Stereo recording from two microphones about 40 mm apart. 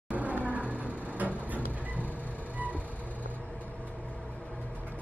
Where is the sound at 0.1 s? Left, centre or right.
Right.